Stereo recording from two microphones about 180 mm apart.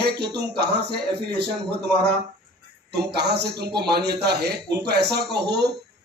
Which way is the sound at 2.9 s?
65° right (ahead or behind).